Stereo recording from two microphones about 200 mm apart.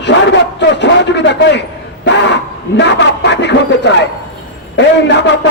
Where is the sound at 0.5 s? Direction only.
60° left (ahead or behind).